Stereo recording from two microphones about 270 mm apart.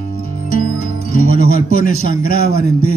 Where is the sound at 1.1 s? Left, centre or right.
Left.